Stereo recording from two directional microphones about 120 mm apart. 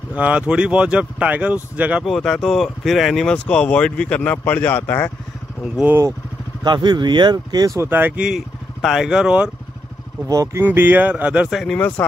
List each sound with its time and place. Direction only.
0.1 s speech: 10° right (ahead or behind)
2.0 s speech: 5° left (ahead or behind); by 5.1 s 20° left (ahead or behind)
6.6 s speech: 40° right (ahead or behind)
7.8 s speech: 15° right (ahead or behind)
8.3 s speech: 5° right (ahead or behind)
10.2 s speech: 30° right (ahead or behind)
10.6 s speech: 15° right (ahead or behind)
11.6 s speech: 10° left (ahead or behind)